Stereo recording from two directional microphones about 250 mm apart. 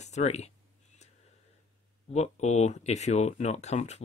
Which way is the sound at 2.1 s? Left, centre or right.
Left.